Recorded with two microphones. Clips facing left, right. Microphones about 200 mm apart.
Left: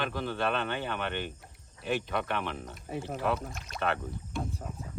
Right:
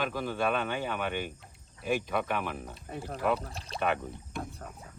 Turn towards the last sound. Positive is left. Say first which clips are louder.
# right 1 dB
turn(degrees=-15)  # may be behind; listen again after turning